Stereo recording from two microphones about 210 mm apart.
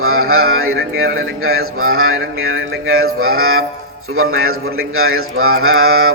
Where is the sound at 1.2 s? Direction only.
80° right.